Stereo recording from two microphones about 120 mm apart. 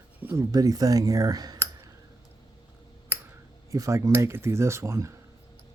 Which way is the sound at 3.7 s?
25° right (ahead or behind).